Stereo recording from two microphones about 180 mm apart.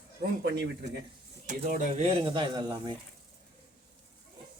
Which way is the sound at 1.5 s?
45° right (ahead or behind).